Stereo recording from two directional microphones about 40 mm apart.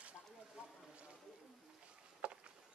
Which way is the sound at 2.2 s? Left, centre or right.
Right.